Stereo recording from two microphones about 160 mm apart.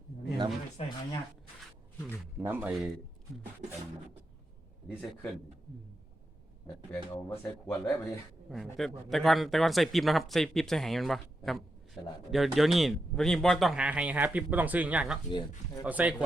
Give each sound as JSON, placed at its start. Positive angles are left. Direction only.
{"t": 2.4, "sound": "speech", "side_deg": -10}
{"t": 7.1, "sound": "speech", "side_deg": 15}
{"t": 8.4, "sound": "speech", "side_deg": 0}
{"t": 15.3, "sound": "speech", "side_deg": 30}
{"t": 15.8, "sound": "speech", "side_deg": -10}